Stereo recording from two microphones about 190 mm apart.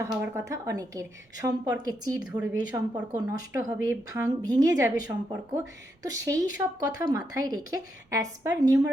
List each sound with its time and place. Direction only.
0.0 s a woman's voice: 15° right (ahead or behind)
2.2 s a woman's voice: 10° right (ahead or behind)